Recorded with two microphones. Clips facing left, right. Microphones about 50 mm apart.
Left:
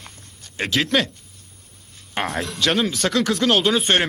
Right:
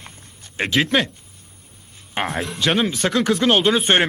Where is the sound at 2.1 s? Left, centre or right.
Centre.